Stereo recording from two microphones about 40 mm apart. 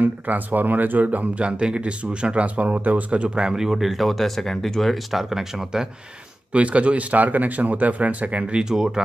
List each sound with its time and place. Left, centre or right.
0.0 s speech: right
1.4 s speech: right
3.4 s speech: centre
5.1 s speech: centre
6.5 s speech: right
8.5 s speech: centre